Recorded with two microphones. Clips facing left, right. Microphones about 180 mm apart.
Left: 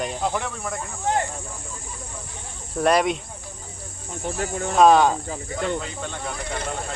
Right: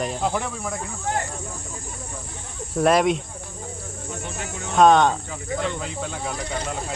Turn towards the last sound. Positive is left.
turn(degrees=-5)  # may be behind; listen again after turning